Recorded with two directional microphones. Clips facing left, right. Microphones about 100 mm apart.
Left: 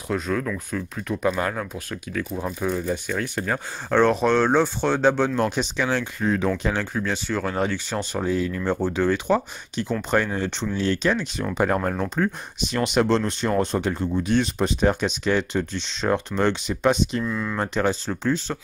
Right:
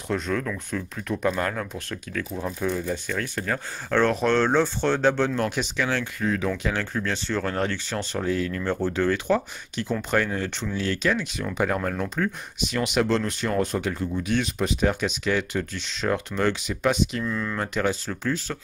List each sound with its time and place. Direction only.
0.1 s speech: 5° left (ahead or behind); by 6.5 s 30° left (ahead or behind)
6.8 s speech: 15° left (ahead or behind); by 17.2 s 30° left (ahead or behind)
17.2 s speech: 10° left (ahead or behind)
17.6 s speech: 30° left (ahead or behind)